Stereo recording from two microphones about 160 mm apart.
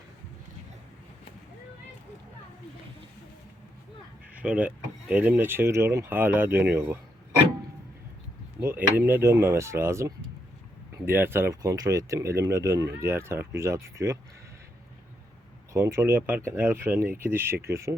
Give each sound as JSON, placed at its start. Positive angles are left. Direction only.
{"t": 4.4, "sound": "speech", "side_deg": -10}
{"t": 8.6, "sound": "speech", "side_deg": -15}
{"t": 15.7, "sound": "speech", "side_deg": -20}